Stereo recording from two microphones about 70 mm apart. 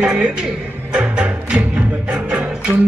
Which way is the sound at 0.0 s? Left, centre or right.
Centre.